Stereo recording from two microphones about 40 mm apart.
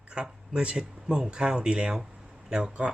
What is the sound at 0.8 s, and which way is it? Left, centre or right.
Speech, centre.